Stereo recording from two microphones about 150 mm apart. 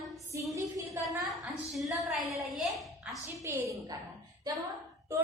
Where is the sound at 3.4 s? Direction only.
20° right (ahead or behind).